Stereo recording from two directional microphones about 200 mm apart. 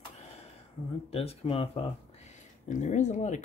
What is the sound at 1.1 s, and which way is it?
Speech, 30° left (ahead or behind).